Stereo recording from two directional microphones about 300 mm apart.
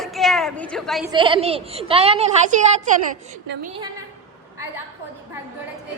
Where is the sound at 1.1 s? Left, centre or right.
Centre.